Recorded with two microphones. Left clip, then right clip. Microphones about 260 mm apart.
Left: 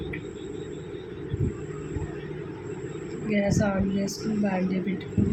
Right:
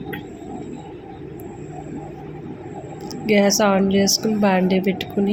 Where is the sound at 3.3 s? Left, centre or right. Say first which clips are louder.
Right 10 dB; right.